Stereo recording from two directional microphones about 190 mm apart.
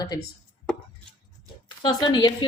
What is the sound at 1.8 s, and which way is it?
Speech, 20° left (ahead or behind).